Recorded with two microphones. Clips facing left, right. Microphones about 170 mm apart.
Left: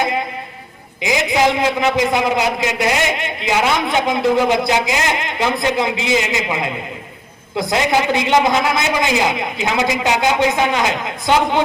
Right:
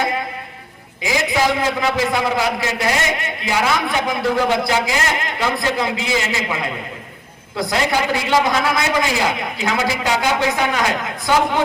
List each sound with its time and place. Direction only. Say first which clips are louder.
1.0 s a man's voice: left 2 dB; 20° left (ahead or behind)